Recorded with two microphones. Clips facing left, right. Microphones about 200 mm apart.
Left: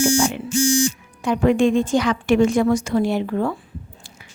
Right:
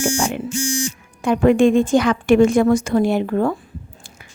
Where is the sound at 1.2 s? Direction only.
50° right (ahead or behind).